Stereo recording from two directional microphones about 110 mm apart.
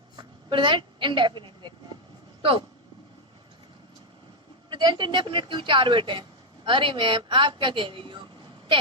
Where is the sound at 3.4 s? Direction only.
45° right (ahead or behind).